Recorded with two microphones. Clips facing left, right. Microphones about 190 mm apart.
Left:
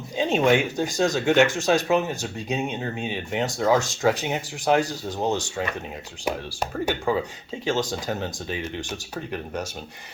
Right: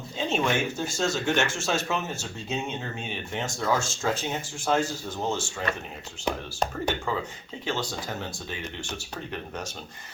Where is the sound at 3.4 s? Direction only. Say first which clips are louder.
Left 8 dB; 35° left (ahead or behind).